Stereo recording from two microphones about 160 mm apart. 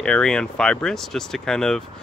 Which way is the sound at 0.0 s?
5° left (ahead or behind).